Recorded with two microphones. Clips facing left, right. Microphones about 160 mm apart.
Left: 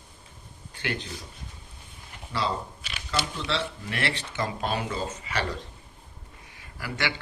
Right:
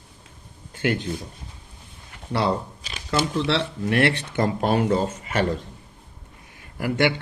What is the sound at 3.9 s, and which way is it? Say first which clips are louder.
Speech: right 13 dB; 60° right (ahead or behind).